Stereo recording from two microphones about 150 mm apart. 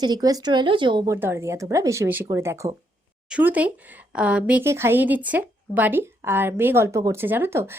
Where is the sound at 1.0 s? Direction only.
15° right (ahead or behind).